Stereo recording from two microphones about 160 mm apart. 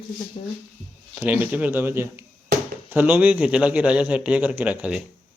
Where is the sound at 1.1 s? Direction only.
10° right (ahead or behind).